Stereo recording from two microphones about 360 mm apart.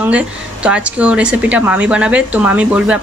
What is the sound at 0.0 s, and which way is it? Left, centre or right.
A woman's voice, centre.